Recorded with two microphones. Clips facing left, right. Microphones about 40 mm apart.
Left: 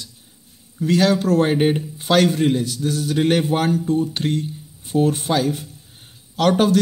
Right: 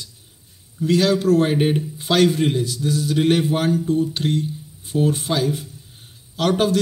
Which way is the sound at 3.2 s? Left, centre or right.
Left.